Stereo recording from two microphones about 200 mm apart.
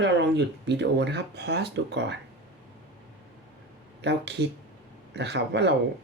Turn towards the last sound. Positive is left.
turn(degrees=-60)  # may be behind; listen again after turning